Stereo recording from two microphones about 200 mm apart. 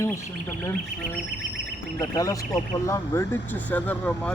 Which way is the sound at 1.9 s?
15° left (ahead or behind).